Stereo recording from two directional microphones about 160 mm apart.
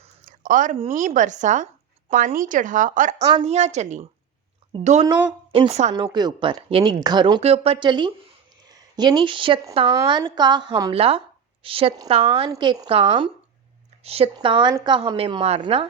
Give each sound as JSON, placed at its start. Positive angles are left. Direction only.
{"t": 0.0, "sound": "a sound", "side_deg": -55}
{"t": 0.9, "sound": "a woman's voice", "side_deg": -50}
{"t": 6.1, "sound": "a woman's voice", "side_deg": -25}
{"t": 10.9, "sound": "a woman's voice", "side_deg": -40}
{"t": 12.5, "sound": "speech", "side_deg": -25}
{"t": 12.9, "sound": "a woman's voice", "side_deg": -35}